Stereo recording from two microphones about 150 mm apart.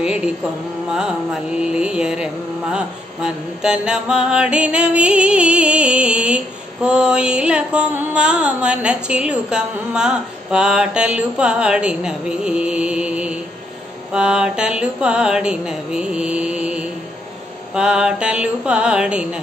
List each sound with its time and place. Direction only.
0.0 s mantra: 5° right (ahead or behind)